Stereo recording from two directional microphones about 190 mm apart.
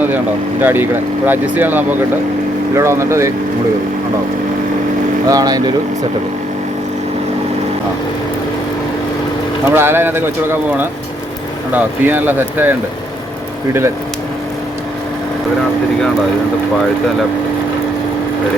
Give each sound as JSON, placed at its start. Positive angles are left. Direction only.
{"t": 0.6, "sound": "speech", "side_deg": -10}
{"t": 5.3, "sound": "speech", "side_deg": -20}
{"t": 9.6, "sound": "speech", "side_deg": -10}